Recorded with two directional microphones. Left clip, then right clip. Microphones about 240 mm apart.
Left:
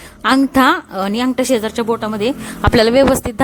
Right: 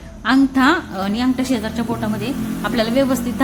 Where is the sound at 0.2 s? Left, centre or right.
Left.